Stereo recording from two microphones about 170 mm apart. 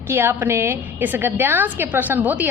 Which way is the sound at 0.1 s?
10° right (ahead or behind).